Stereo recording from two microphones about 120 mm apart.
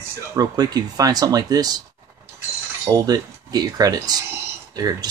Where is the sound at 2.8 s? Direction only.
30° right (ahead or behind).